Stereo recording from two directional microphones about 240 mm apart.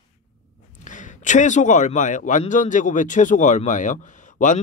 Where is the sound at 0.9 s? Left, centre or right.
Left.